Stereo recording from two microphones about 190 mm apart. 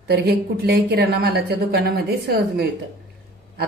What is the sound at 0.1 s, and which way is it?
Speech, 60° right (ahead or behind).